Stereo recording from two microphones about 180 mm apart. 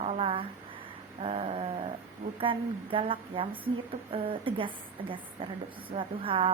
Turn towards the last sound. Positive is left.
turn(degrees=-30)  # may be behind; listen again after turning